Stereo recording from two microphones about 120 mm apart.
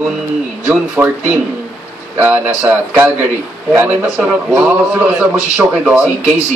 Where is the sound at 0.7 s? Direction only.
15° right (ahead or behind).